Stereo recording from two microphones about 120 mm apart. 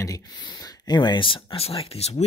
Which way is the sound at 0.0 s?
30° left (ahead or behind).